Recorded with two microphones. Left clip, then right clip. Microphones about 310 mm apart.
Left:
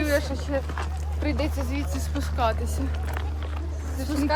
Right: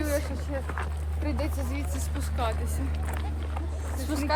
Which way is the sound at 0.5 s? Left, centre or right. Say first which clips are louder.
Left 5 dB; left.